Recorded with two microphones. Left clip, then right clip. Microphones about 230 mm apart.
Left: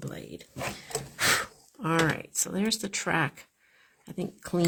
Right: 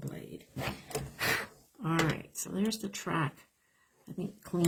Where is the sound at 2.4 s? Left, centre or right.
Left.